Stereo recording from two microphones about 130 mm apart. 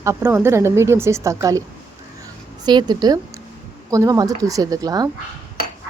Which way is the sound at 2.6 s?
35° right (ahead or behind).